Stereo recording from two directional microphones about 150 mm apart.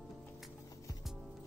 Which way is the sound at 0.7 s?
20° left (ahead or behind).